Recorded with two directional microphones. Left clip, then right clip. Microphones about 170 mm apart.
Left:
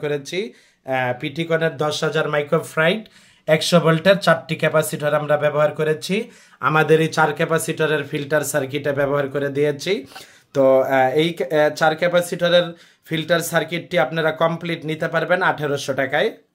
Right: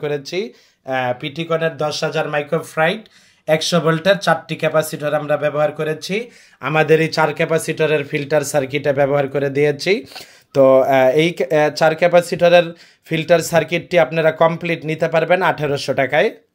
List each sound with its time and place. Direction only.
0.0 s speech: 5° right (ahead or behind); by 16.3 s 25° right (ahead or behind)